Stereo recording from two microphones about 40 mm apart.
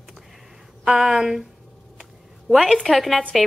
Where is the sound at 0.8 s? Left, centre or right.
Centre.